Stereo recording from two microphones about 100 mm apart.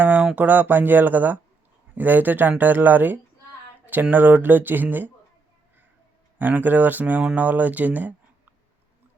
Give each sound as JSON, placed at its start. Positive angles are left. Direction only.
{"t": 0.0, "sound": "a sound", "side_deg": -15}
{"t": 0.3, "sound": "speech", "side_deg": -15}
{"t": 6.4, "sound": "speech", "side_deg": -20}